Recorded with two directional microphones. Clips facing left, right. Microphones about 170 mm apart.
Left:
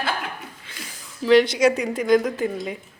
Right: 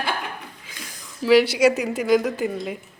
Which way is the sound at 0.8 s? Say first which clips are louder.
Right 1 dB; 5° right (ahead or behind).